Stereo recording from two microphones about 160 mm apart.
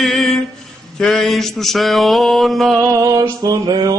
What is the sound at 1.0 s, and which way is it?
Mantra, 5° left (ahead or behind).